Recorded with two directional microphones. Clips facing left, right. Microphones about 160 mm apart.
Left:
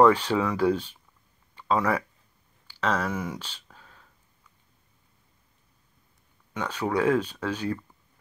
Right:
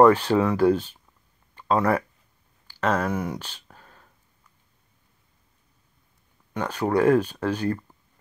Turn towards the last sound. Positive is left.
turn(degrees=-10)  # may be behind; listen again after turning